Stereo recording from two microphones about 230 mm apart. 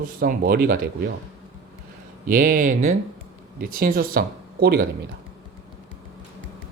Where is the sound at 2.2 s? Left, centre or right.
Right.